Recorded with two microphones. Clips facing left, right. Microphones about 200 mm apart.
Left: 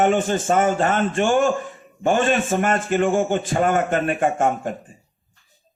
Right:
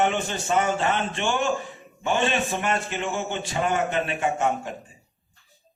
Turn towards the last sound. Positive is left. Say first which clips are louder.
# left 4 dB
turn(degrees=50)  # may be behind; listen again after turning